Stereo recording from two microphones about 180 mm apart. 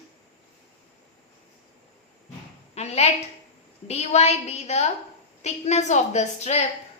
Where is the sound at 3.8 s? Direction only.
35° left (ahead or behind).